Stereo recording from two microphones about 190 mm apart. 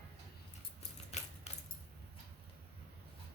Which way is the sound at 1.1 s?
35° left (ahead or behind).